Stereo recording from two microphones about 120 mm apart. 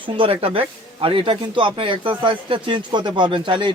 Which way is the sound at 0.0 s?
50° right (ahead or behind).